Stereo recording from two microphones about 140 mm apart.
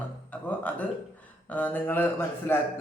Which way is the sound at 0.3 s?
10° left (ahead or behind).